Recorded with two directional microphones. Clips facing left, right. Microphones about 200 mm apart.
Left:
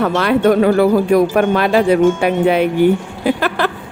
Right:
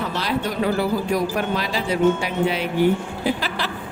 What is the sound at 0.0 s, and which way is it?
Speech, 60° left (ahead or behind).